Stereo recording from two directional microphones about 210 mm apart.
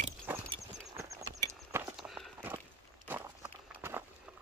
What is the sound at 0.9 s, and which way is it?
Horse, 15° right (ahead or behind).